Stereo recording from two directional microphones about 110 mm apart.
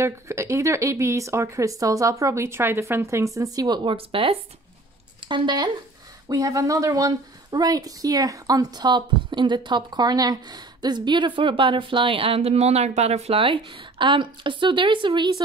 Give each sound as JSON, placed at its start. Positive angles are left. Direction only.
{"t": 0.0, "sound": "speech", "side_deg": -25}
{"t": 3.9, "sound": "speech", "side_deg": -55}
{"t": 5.3, "sound": "speech", "side_deg": -45}
{"t": 6.2, "sound": "speech", "side_deg": -30}